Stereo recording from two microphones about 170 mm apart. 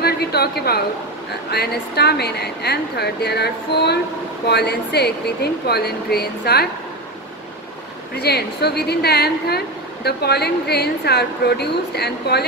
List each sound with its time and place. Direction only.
0.0 s a sound: 70° left (ahead or behind)
1.5 s a woman's voice: 70° left (ahead or behind)
8.2 s a woman's voice: 70° left (ahead or behind)